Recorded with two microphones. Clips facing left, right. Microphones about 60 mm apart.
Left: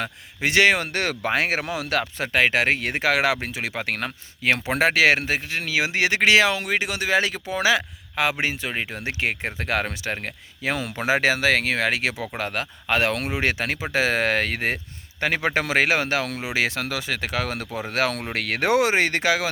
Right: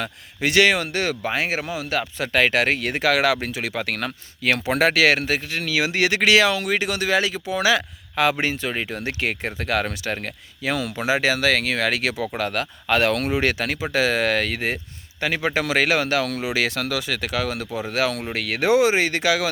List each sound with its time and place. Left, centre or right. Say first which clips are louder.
0.0 s speech: right 1 dB; left
0.9 s speech: even; left
2.3 s speech: right 1 dB; centre
7.2 s speech: right 1 dB; left
8.1 s speech: right 3 dB; centre; by 11.3 s left
11.3 s speech: even; left
15.6 s speech: right 1 dB; left